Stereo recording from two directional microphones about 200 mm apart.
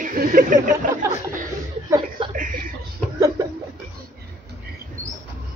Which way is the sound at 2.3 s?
40° right (ahead or behind).